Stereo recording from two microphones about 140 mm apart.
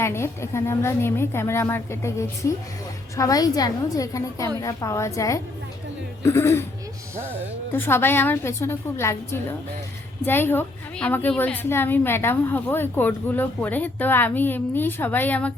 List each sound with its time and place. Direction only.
0.0 s a woman's voice: 20° left (ahead or behind)
7.7 s a woman's voice: 15° left (ahead or behind)